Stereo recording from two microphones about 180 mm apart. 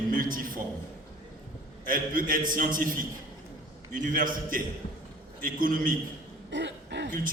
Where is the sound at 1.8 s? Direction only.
50° right (ahead or behind).